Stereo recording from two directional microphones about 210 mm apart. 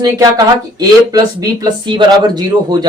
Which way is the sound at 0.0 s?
15° right (ahead or behind).